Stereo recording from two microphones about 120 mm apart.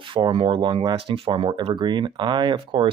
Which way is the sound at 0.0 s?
45° right (ahead or behind).